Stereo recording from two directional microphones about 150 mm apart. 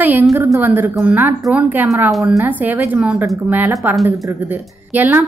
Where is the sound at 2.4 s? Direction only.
10° right (ahead or behind).